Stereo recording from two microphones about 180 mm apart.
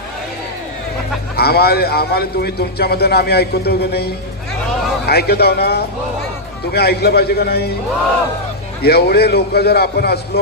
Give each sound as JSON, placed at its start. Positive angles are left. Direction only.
{"t": 1.4, "sound": "a man's voice", "side_deg": 60}
{"t": 8.8, "sound": "a man's voice", "side_deg": 60}